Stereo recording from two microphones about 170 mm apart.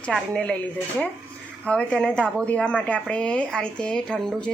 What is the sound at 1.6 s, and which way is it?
A woman's voice, 5° left (ahead or behind).